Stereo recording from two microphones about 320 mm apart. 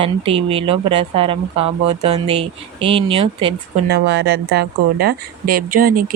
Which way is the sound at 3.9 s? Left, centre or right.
Right.